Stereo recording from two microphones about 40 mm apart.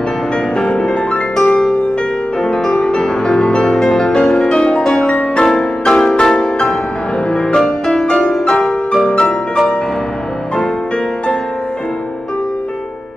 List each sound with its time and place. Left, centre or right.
0.6 s music: centre
5.4 s music: centre